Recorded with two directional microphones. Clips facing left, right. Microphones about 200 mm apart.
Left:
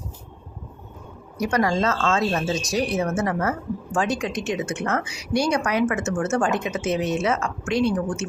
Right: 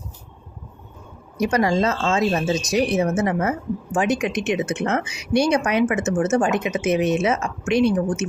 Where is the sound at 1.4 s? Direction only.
20° right (ahead or behind).